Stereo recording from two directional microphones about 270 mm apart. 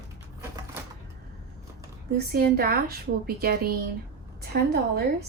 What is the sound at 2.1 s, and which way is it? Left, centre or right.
A woman's voice, right.